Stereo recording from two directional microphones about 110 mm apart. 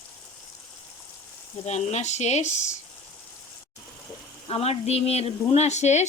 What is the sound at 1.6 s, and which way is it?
Speech, 90° left.